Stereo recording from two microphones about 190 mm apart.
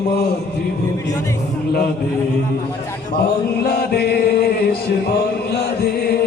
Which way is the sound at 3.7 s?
55° left (ahead or behind).